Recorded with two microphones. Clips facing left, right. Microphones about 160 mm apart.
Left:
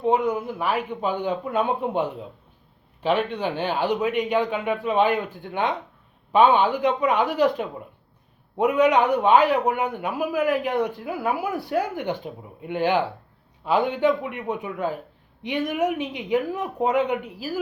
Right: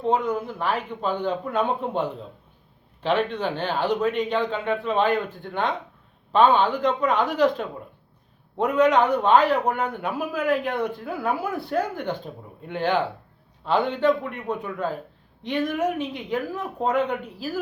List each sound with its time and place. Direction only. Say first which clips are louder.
0.0 s speech: left 2 dB; 15° left (ahead or behind)